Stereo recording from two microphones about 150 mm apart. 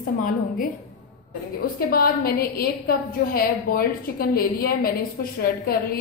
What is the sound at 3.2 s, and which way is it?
A woman's voice, 70° left (ahead or behind).